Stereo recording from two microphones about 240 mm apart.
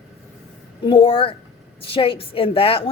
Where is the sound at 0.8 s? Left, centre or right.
Left.